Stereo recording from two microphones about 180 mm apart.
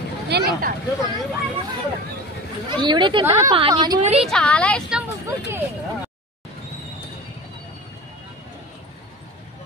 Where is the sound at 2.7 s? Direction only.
25° right (ahead or behind).